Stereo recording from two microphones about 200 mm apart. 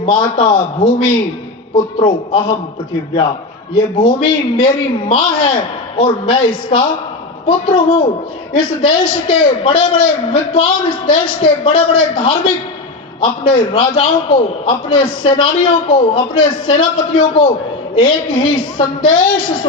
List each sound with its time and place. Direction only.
0.0 s a man's voice: 25° left (ahead or behind)
3.9 s a man's voice: 25° left (ahead or behind)